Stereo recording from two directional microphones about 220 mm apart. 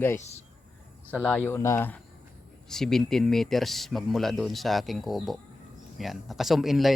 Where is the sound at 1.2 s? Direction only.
10° left (ahead or behind).